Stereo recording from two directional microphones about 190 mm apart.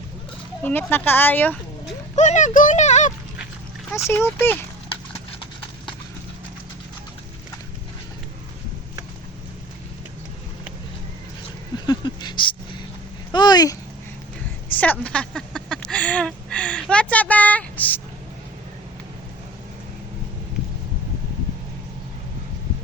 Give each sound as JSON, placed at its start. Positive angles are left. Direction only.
{"t": 0.6, "sound": "speech", "side_deg": 10}
{"t": 2.1, "sound": "speech", "side_deg": 40}
{"t": 3.9, "sound": "speech", "side_deg": 15}
{"t": 11.9, "sound": "a sound", "side_deg": 25}
{"t": 13.3, "sound": "speech", "side_deg": 20}
{"t": 14.8, "sound": "speech", "side_deg": 5}